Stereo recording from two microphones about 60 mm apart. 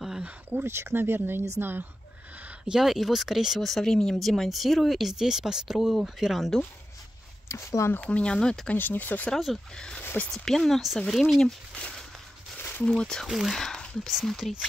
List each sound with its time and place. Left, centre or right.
0.5 s speech: right
2.7 s speech: centre
7.4 s speech: left
7.9 s speech: left
8.7 s speech: left
9.8 s speech: centre
11.7 s a sound: centre
12.5 s a sound: left
12.8 s speech: centre